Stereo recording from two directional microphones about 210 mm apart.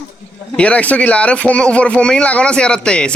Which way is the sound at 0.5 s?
5° left (ahead or behind).